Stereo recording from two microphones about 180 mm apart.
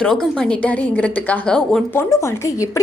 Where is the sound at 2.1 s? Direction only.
15° left (ahead or behind).